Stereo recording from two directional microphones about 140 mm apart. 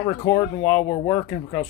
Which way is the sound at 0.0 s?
30° left (ahead or behind).